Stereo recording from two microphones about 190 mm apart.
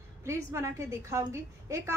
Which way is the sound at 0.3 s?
15° right (ahead or behind).